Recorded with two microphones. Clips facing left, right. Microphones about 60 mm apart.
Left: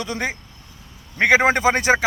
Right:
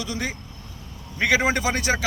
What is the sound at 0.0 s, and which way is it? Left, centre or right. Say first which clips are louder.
A man's voice: left 3 dB; left.